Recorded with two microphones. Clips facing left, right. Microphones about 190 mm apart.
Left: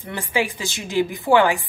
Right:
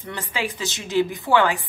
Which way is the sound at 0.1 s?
10° left (ahead or behind).